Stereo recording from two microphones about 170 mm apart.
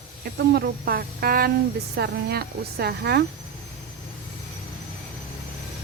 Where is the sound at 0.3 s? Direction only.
70° right (ahead or behind).